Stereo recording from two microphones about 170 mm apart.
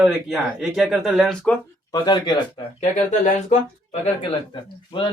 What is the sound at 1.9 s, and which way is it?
Speech, 25° left (ahead or behind).